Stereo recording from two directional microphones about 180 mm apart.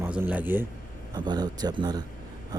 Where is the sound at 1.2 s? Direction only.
25° right (ahead or behind).